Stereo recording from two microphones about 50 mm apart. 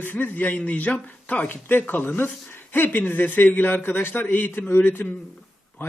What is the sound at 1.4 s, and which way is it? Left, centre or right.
A man's voice, left.